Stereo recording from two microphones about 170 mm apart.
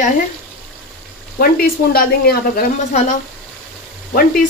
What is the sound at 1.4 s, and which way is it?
Speech, 60° left (ahead or behind).